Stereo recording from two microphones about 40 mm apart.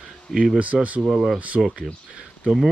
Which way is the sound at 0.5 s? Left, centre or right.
Right.